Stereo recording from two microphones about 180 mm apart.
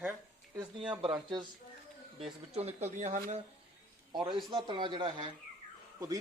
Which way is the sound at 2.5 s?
35° right (ahead or behind).